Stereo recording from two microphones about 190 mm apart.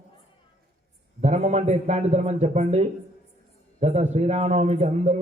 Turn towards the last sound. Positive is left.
turn(degrees=-35)  # may be behind; listen again after turning